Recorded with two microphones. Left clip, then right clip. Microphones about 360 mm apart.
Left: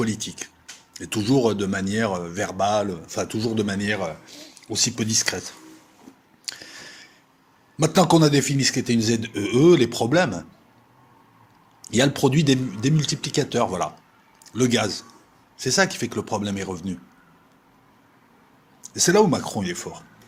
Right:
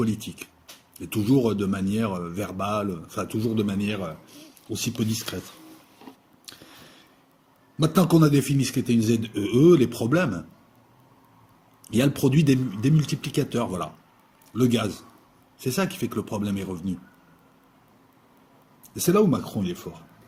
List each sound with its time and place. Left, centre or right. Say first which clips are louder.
0.0 s a man's voice: left 2 dB; centre
6.5 s a sound: left 11 dB; centre
7.8 s a man's voice: left 4 dB; centre
11.8 s a man's voice: left 4 dB; centre
18.8 s a man's voice: left 4 dB; centre